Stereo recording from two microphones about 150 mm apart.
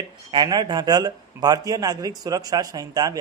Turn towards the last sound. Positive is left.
turn(degrees=-25)  # may be behind; listen again after turning